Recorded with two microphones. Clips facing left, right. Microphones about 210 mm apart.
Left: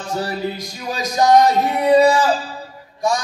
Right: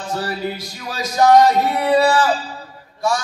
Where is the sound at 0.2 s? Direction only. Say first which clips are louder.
Left 1 dB; 15° left (ahead or behind).